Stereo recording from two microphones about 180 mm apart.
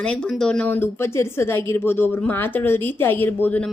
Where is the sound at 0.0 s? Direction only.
5° left (ahead or behind).